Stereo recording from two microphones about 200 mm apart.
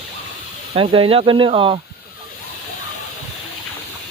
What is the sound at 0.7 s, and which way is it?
Speech, 25° right (ahead or behind).